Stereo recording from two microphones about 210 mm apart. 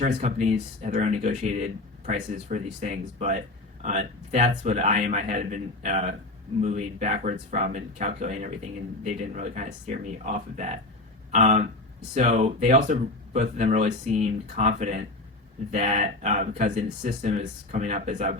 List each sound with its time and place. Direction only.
0.2 s speech: 35° right (ahead or behind)